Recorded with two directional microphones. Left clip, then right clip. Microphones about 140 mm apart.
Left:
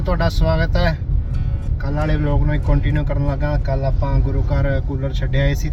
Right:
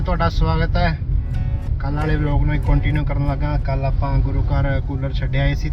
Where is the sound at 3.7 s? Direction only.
20° left (ahead or behind).